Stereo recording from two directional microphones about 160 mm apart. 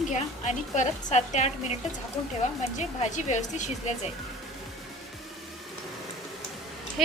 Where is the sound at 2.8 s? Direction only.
50° left (ahead or behind).